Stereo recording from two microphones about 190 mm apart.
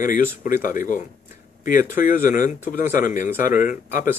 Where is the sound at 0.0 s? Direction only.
45° left (ahead or behind).